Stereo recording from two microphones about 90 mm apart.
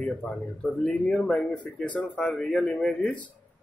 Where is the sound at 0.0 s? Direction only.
10° left (ahead or behind).